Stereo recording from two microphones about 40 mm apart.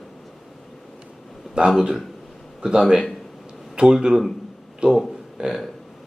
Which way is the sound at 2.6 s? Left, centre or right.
Centre.